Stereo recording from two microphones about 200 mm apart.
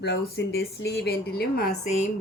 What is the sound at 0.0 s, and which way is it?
A woman's voice, 55° left (ahead or behind).